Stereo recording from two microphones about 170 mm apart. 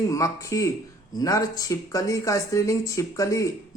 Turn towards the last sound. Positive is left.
turn(degrees=20)  # may be behind; listen again after turning